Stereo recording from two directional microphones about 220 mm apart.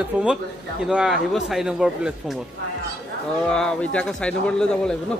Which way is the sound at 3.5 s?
5° left (ahead or behind).